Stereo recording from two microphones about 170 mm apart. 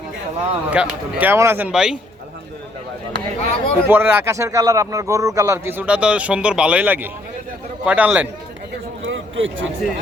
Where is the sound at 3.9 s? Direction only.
15° right (ahead or behind).